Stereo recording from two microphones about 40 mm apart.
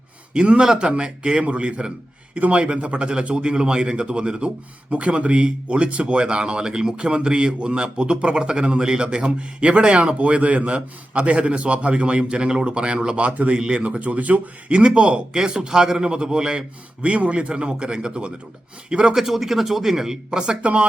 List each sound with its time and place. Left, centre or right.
0.4 s a man's voice: right
13.2 s speech: right
13.6 s a man's voice: right
13.8 s speech: right
14.7 s a man's voice: right
15.3 s a man's voice: centre
19.1 s speech: centre
20.6 s speech: right